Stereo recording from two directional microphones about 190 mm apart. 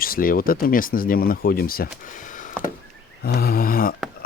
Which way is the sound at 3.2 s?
55° left (ahead or behind).